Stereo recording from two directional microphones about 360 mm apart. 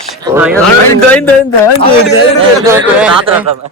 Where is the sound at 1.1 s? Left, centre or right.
Centre.